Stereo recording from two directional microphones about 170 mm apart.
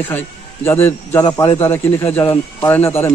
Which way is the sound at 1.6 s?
15° left (ahead or behind).